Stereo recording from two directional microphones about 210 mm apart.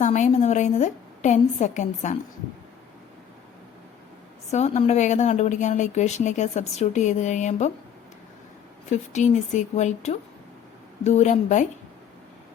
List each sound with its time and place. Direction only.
0.0 s speech: 35° left (ahead or behind)
4.5 s speech: 30° left (ahead or behind)
8.9 s speech: 35° left (ahead or behind)